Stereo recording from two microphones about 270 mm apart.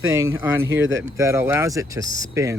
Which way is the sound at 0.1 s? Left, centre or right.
Centre.